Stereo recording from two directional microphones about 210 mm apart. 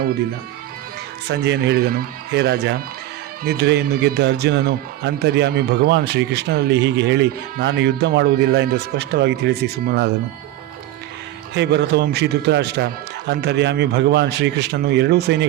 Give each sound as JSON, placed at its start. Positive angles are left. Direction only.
{"t": 1.3, "sound": "speech", "side_deg": -55}
{"t": 11.5, "sound": "speech", "side_deg": -55}